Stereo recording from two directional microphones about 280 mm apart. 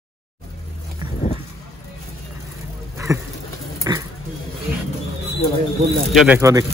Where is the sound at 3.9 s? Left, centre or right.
Centre.